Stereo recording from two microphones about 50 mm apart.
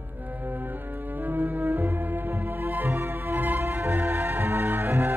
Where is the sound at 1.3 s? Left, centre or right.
Right.